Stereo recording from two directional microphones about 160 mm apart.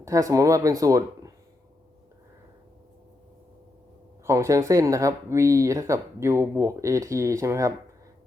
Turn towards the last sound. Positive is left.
turn(degrees=-20)  # may be behind; listen again after turning